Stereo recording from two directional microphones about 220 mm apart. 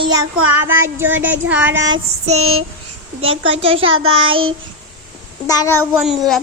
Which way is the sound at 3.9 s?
65° right (ahead or behind).